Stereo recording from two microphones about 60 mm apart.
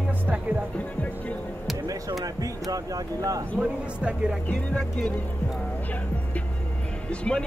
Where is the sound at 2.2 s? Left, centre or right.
Right.